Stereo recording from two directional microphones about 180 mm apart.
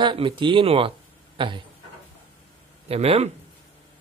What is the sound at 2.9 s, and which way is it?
Speech, 35° right (ahead or behind).